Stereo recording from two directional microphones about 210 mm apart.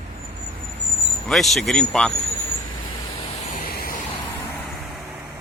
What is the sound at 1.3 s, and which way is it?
Speech, centre (ahead or behind).